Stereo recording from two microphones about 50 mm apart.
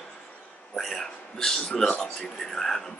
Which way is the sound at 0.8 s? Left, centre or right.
Centre.